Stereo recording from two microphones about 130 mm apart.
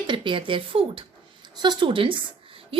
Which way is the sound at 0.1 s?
40° right (ahead or behind).